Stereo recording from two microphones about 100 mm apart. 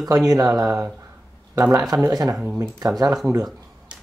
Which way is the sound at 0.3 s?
35° right (ahead or behind).